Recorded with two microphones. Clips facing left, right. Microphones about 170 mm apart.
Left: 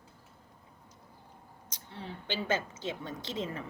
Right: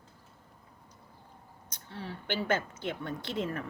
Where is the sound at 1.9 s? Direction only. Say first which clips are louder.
Right 2 dB; 20° left (ahead or behind).